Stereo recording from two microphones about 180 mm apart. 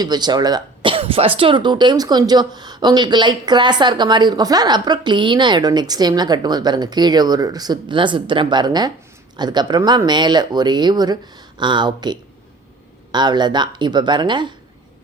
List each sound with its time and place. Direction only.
0.0 s speech: 25° right (ahead or behind)